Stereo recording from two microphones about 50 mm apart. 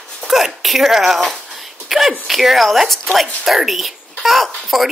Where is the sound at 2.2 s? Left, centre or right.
Centre.